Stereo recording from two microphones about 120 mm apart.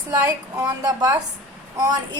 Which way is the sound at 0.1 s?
30° right (ahead or behind).